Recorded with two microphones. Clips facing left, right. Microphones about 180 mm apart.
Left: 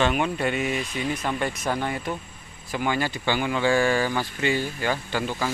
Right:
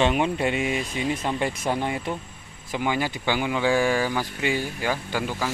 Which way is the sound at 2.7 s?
15° right (ahead or behind).